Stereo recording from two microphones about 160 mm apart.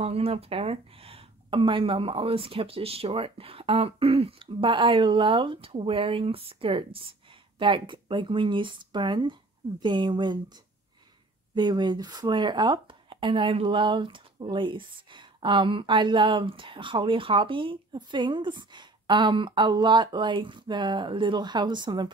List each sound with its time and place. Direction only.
0.0 s a woman's voice: 40° right (ahead or behind)
11.5 s speech: 25° right (ahead or behind)